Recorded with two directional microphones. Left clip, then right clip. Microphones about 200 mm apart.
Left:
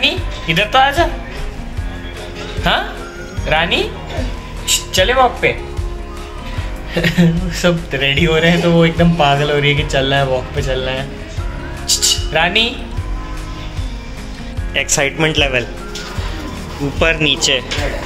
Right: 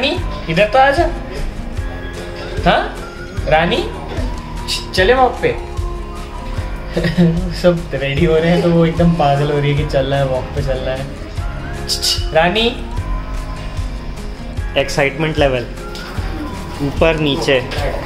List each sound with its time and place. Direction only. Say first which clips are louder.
0.0 s speech: left 2 dB; centre (ahead or behind)
2.6 s speech: right 2 dB; centre (ahead or behind)
4.9 s a man's voice: right 1 dB; 15° left (ahead or behind)
6.9 s a man's voice: left 1 dB; 10° left (ahead or behind)
12.0 s speech: right 2 dB; 5° left (ahead or behind)
14.7 s speech: right 1 dB; centre (ahead or behind)
17.0 s speech: left 1 dB; 5° right (ahead or behind)